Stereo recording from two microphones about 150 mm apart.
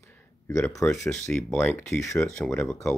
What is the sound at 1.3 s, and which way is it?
Speech, 5° left (ahead or behind).